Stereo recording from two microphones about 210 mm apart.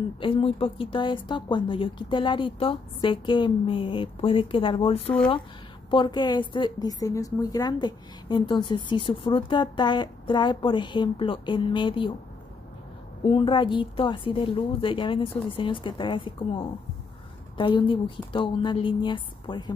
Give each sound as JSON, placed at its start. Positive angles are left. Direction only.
{"t": 0.2, "sound": "a woman's voice", "side_deg": 25}
{"t": 13.2, "sound": "a woman's voice", "side_deg": 25}